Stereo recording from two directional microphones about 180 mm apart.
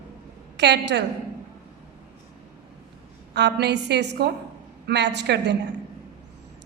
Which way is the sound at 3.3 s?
70° right (ahead or behind).